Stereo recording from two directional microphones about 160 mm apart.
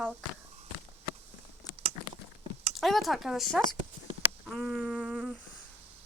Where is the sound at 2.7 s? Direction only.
Centre (ahead or behind).